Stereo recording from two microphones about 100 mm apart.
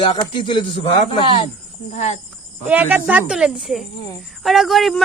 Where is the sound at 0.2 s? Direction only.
55° left (ahead or behind).